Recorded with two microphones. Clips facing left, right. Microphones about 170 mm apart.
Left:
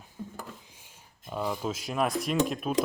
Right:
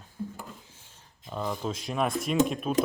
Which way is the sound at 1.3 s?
5° left (ahead or behind).